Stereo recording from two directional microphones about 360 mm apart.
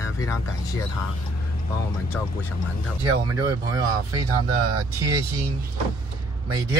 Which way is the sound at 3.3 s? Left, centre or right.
Centre.